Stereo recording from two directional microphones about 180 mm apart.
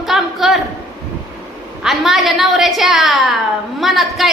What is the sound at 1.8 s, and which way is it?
A woman's voice, centre (ahead or behind).